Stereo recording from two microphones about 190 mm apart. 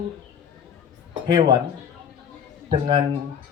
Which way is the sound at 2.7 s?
20° right (ahead or behind).